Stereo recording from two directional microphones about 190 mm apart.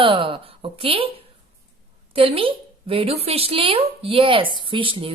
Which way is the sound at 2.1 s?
30° right (ahead or behind).